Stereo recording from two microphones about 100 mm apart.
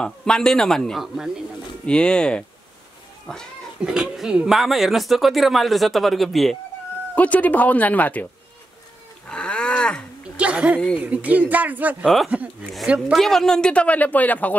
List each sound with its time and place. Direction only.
0.0 s speech: 5° left (ahead or behind)
1.0 s speech: 5° right (ahead or behind)
1.9 s a man's voice: 10° left (ahead or behind)
3.8 s speech: 5° right (ahead or behind)
7.2 s a man's voice: 15° left (ahead or behind)
9.3 s livestock: 10° left (ahead or behind)
10.3 s a sound: 10° right (ahead or behind)
11.0 s speech: 15° right (ahead or behind)
13.1 s a man's voice: 5° left (ahead or behind)